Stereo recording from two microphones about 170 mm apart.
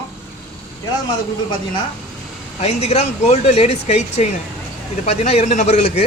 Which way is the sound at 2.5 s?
40° left (ahead or behind).